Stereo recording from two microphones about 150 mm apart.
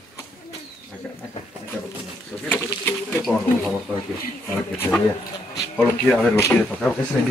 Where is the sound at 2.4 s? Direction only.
10° left (ahead or behind).